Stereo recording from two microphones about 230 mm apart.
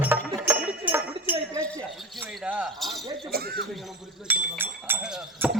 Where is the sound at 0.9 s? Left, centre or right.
Centre.